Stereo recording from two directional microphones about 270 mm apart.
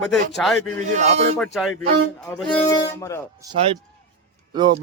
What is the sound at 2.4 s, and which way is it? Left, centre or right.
Speech, centre.